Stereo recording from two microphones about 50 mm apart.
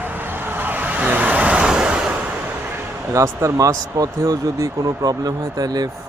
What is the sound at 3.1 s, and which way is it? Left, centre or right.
Speech, right.